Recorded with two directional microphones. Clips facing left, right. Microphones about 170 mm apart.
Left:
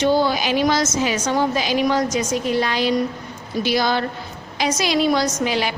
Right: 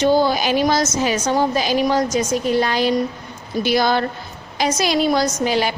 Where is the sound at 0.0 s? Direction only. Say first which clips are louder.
Right 2 dB; 40° right (ahead or behind).